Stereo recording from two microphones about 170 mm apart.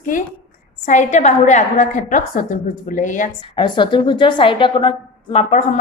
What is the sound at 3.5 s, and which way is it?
A woman's voice, 25° left (ahead or behind).